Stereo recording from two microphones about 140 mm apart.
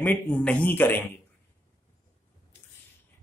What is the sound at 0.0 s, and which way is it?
A man's voice, 10° left (ahead or behind).